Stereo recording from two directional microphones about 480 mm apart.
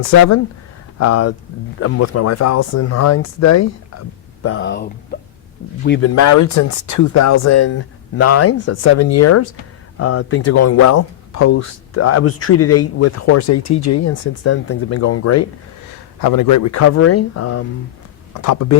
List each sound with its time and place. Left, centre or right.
0.9 s speech: left
4.4 s speech: left
6.1 s speech: left
16.2 s speech: left